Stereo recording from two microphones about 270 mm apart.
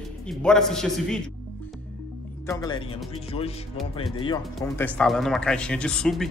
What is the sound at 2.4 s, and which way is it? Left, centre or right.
Speech, centre.